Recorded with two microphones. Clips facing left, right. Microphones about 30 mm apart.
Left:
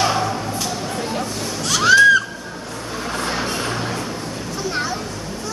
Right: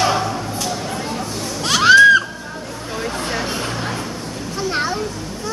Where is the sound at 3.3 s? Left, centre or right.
Centre.